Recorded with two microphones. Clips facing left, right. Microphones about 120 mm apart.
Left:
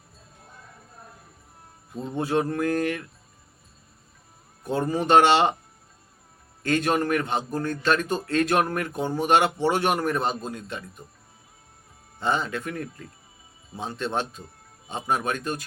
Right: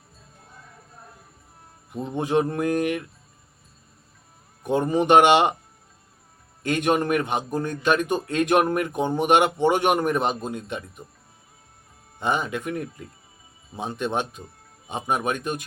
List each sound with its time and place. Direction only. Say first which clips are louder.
1.9 s a man's voice: right 2 dB; 20° right (ahead or behind)
4.6 s a man's voice: right 4 dB; 20° right (ahead or behind)
6.6 s a man's voice: right 1 dB; 15° right (ahead or behind)
12.2 s a man's voice: right 1 dB; 15° right (ahead or behind)